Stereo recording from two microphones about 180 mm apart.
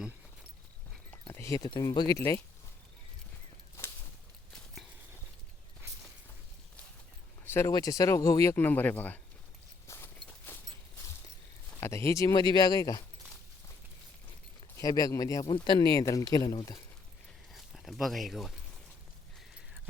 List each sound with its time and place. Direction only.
1.3 s speech: 15° left (ahead or behind)
4.5 s horse: centre (ahead or behind)
7.4 s speech: 15° left (ahead or behind)
9.8 s a sound: 15° left (ahead or behind)
11.8 s speech: 15° left (ahead or behind)
14.8 s speech: 20° left (ahead or behind)
17.5 s speech: centre (ahead or behind)